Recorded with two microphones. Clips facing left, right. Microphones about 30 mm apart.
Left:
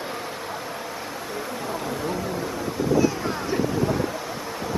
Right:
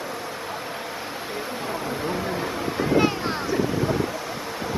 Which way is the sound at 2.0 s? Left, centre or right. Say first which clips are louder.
Right 1 dB; right.